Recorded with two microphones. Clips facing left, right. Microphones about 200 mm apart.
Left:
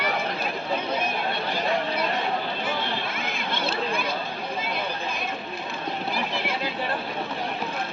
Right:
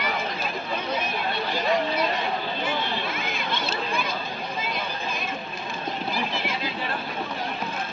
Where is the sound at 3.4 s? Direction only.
55° left (ahead or behind).